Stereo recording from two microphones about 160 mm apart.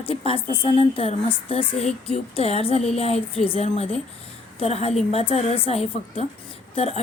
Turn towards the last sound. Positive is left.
turn(degrees=40)  # may be behind; listen again after turning